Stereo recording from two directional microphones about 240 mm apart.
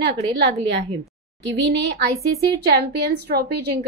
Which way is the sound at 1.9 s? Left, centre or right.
Right.